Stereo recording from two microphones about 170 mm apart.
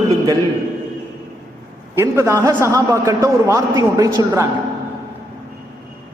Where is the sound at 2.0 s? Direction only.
15° right (ahead or behind).